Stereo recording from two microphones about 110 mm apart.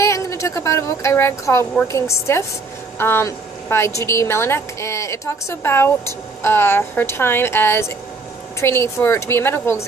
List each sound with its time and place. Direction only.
0.0 s a child's voice: 25° left (ahead or behind)